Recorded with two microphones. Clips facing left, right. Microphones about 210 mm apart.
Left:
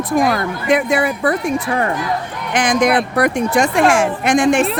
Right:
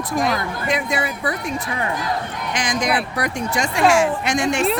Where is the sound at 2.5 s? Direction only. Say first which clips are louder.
Left 8 dB; 55° left (ahead or behind).